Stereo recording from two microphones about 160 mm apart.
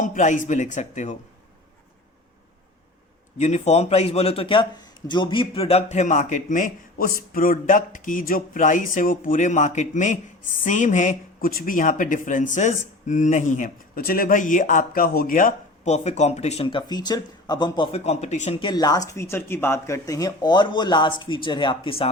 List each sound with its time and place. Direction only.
0.0 s a man's voice: 50° left (ahead or behind)
3.3 s a man's voice: 45° left (ahead or behind)
16.6 s speech: 30° left (ahead or behind)
17.9 s a man's voice: 40° left (ahead or behind)
18.6 s speech: 25° left (ahead or behind)